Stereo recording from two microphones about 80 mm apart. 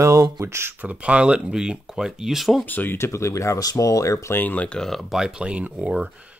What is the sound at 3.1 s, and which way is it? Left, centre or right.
Speech, left.